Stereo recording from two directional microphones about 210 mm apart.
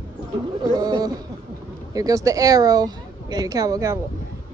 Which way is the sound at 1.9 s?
15° right (ahead or behind).